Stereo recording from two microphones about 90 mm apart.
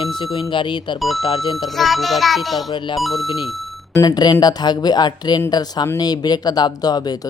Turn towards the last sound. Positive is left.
turn(degrees=50)  # may be behind; listen again after turning